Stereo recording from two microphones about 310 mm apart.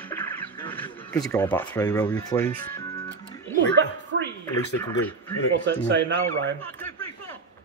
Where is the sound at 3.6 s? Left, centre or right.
Right.